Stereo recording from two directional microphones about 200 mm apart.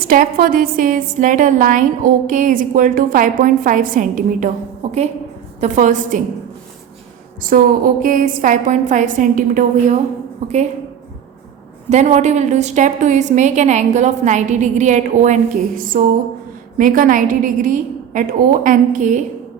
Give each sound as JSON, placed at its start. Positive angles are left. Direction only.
{"t": 0.0, "sound": "a woman's voice", "side_deg": -45}
{"t": 7.5, "sound": "a woman's voice", "side_deg": -45}
{"t": 11.9, "sound": "a woman's voice", "side_deg": -35}